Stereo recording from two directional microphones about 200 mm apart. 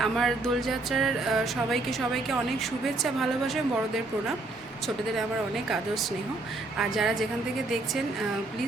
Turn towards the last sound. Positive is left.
turn(degrees=0)  # may be behind; listen again after turning